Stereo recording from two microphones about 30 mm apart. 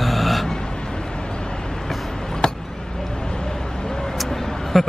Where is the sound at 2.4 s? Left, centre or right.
Left.